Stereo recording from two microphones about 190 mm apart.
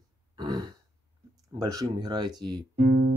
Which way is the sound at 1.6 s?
20° right (ahead or behind).